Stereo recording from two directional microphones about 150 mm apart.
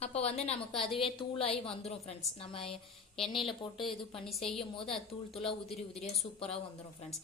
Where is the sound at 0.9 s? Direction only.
35° left (ahead or behind).